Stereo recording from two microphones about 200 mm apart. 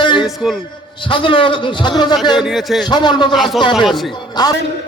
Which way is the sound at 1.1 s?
25° left (ahead or behind).